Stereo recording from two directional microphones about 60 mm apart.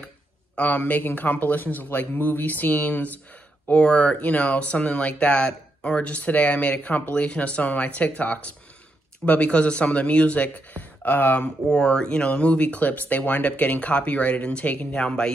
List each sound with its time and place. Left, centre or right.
0.6 s speech: left
11.4 s speech: centre